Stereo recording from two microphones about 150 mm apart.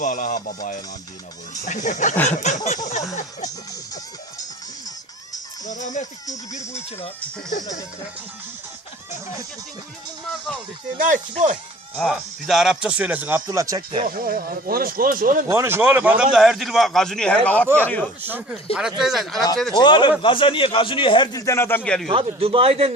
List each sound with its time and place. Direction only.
0.0 s speech: 60° left (ahead or behind)
7.6 s a sound: 25° left (ahead or behind)
10.9 s speech: 60° right (ahead or behind)
11.9 s speech: centre (ahead or behind); by 14.0 s 25° right (ahead or behind)
14.0 s speech: 70° right (ahead or behind)
15.4 s a man's voice: 15° right (ahead or behind); by 18.0 s 10° left (ahead or behind)
18.2 s a man's voice: 10° right (ahead or behind)
19.7 s a man's voice: 30° left (ahead or behind)
21.8 s a man's voice: 5° left (ahead or behind)
22.1 s a man's voice: 40° right (ahead or behind)